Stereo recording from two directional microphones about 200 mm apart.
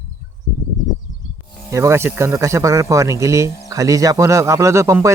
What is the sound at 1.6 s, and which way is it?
A man's voice, 15° right (ahead or behind).